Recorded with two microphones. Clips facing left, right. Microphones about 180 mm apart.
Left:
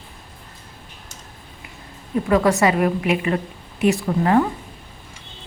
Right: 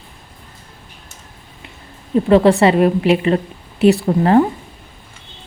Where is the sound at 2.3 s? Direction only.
30° right (ahead or behind).